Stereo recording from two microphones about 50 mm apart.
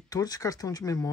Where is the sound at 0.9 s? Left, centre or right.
Left.